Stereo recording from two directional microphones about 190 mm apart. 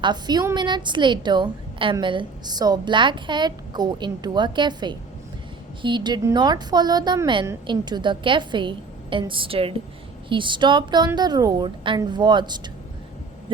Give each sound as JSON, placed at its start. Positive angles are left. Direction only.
{"t": 0.0, "sound": "a woman's voice", "side_deg": -20}